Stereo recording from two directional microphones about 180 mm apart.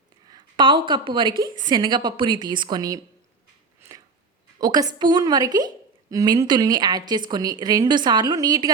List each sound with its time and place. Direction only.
0.3 s a woman's voice: 25° right (ahead or behind)
4.6 s a woman's voice: 20° right (ahead or behind)